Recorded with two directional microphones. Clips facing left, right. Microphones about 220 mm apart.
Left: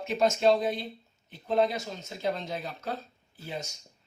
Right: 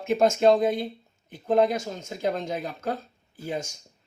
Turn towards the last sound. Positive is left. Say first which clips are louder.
# right 6 dB
turn(degrees=-50)  # may be behind; listen again after turning